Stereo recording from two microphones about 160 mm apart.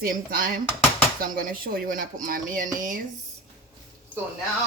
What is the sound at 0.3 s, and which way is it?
Speech, 60° right (ahead or behind).